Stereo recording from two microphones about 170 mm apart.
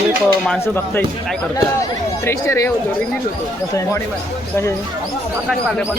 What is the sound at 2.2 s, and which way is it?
Speech, 15° left (ahead or behind).